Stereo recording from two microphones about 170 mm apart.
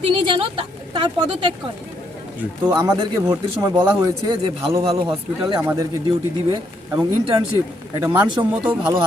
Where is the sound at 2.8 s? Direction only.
25° right (ahead or behind).